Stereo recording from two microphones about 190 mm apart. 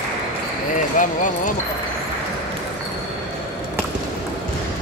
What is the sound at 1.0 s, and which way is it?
Speech, 45° left (ahead or behind).